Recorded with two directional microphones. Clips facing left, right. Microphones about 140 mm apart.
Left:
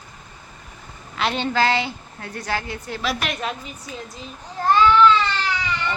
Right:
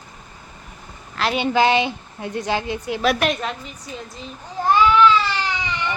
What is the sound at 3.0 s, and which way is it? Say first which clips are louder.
Speech: right 7 dB; 50° right (ahead or behind).